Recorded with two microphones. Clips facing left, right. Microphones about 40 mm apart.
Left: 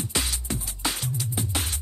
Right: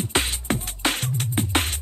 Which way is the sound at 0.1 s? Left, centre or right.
Right.